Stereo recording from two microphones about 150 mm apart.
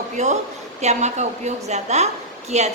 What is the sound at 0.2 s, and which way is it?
A woman's voice, 50° right (ahead or behind).